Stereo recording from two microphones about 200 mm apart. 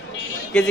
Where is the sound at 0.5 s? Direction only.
5° left (ahead or behind).